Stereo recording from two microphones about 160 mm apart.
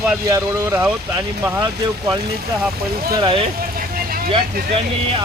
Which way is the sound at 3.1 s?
30° right (ahead or behind).